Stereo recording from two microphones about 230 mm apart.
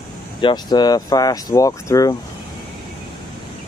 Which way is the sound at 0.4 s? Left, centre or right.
Centre.